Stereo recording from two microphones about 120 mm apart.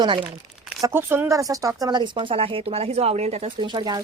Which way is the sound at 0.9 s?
20° right (ahead or behind).